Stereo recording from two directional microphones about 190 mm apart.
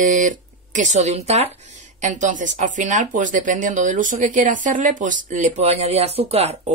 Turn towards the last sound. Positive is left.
turn(degrees=-35)  # may be behind; listen again after turning